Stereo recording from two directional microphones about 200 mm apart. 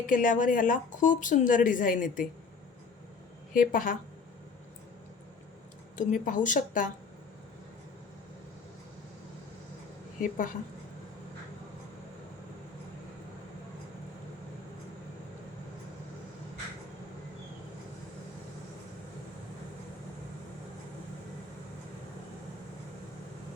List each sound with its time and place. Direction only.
0.0 s speech: 40° left (ahead or behind)
3.5 s a woman's voice: 40° left (ahead or behind)
6.0 s speech: 40° left (ahead or behind)
10.2 s speech: 40° left (ahead or behind)